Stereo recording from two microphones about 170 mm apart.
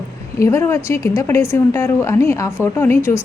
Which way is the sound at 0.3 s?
15° left (ahead or behind).